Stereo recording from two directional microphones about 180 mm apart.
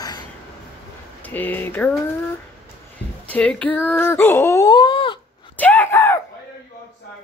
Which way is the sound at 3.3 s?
5° left (ahead or behind).